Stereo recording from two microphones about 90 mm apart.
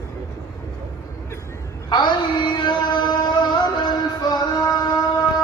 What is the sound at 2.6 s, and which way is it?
Music, 60° left (ahead or behind).